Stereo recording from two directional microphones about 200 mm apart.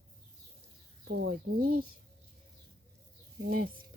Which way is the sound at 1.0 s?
50° right (ahead or behind).